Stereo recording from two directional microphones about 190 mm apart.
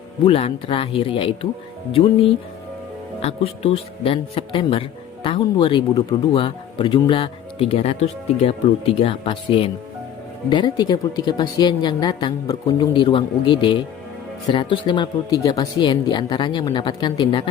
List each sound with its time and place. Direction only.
0.3 s speech: 30° left (ahead or behind)